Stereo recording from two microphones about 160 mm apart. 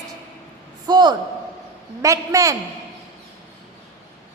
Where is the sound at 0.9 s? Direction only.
25° right (ahead or behind).